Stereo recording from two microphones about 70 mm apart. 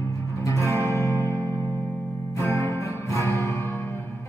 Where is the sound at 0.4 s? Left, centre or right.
Left.